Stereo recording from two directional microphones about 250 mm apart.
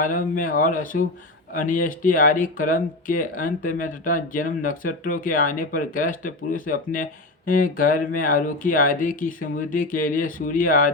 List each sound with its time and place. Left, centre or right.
0.0 s speech: left